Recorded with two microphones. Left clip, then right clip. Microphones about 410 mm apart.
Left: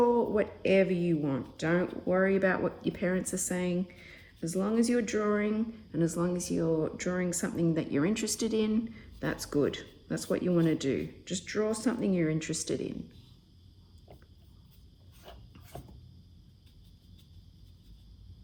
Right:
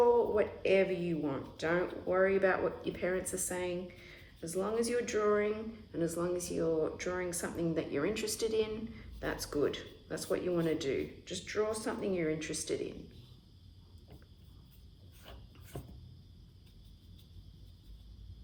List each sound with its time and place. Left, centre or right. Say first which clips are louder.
0.3 s speech: left 3 dB; centre